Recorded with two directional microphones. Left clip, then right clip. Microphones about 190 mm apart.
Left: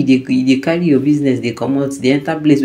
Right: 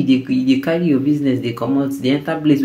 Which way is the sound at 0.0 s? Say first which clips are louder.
Left 3 dB; 15° left (ahead or behind).